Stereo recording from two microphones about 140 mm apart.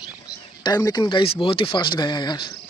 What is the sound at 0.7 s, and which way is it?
Speech, 25° left (ahead or behind).